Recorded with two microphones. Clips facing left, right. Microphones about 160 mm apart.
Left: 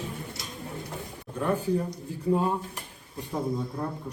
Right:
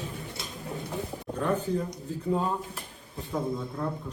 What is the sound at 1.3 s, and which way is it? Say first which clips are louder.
Speech: left 2 dB; 10° left (ahead or behind).